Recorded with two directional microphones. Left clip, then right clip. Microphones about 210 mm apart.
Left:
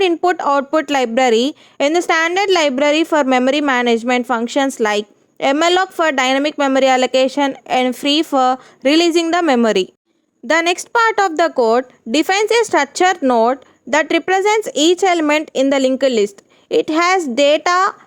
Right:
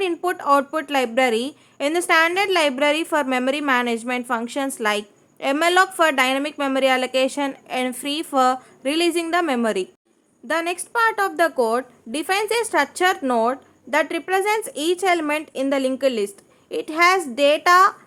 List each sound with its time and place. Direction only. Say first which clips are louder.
0.0 s speech: left 8 dB; 30° left (ahead or behind)